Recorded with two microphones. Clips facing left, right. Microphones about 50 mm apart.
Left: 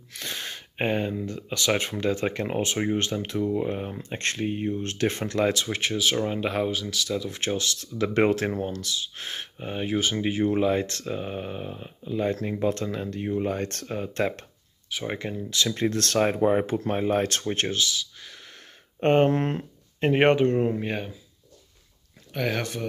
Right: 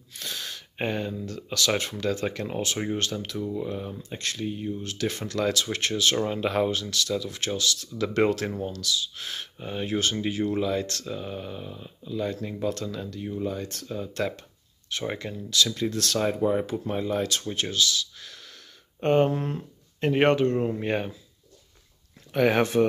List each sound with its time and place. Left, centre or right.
0.2 s speech: left
5.8 s speech: centre; by 14.1 s left
14.9 s speech: centre
15.1 s speech: left
15.8 s speech: left
17.6 s speech: left
18.9 s speech: left
19.3 s speech: left
20.0 s speech: left
20.8 s speech: centre
22.5 s speech: right